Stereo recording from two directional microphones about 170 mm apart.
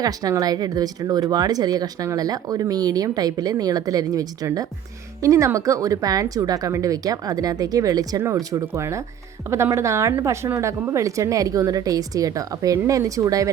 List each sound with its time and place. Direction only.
0.0 s speech: 20° right (ahead or behind)